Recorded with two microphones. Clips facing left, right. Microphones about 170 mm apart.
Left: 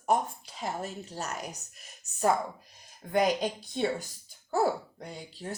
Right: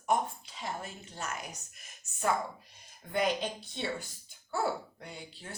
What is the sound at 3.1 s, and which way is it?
A woman's voice, 40° left (ahead or behind).